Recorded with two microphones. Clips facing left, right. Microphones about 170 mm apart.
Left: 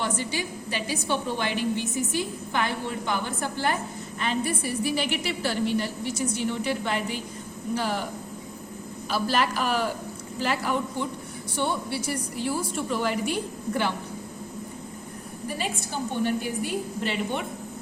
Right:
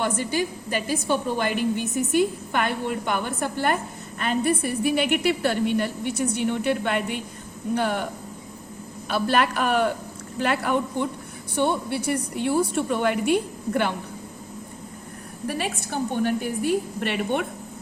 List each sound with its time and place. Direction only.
0.0 s a woman's voice: 50° right (ahead or behind)
9.0 s a woman's voice: 60° right (ahead or behind)
15.4 s a woman's voice: 65° right (ahead or behind)